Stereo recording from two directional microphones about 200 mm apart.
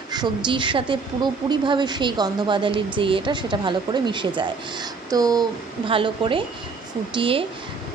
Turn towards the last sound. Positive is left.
turn(degrees=-25)  # may be behind; listen again after turning